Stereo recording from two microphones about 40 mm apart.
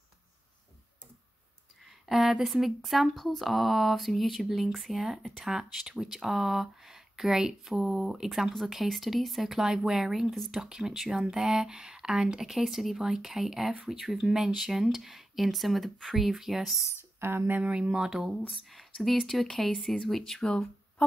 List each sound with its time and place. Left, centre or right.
1.9 s a sound: centre
2.4 s speech: centre
9.5 s speech: centre
17.2 s speech: right
17.5 s speech: right
17.9 s speech: centre
18.5 s speech: centre